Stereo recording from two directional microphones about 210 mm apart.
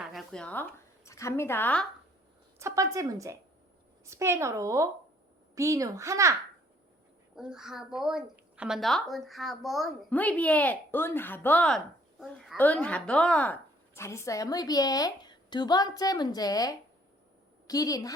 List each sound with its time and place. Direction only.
0.1 s speech: centre (ahead or behind)
2.6 s a woman's voice: 15° right (ahead or behind)
7.3 s a woman's voice: 5° right (ahead or behind); by 18.1 s 15° left (ahead or behind)